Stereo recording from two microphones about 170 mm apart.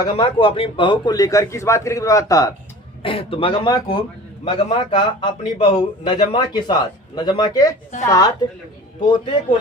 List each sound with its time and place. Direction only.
0.0 s speech: 30° left (ahead or behind)
3.0 s speech: 30° left (ahead or behind)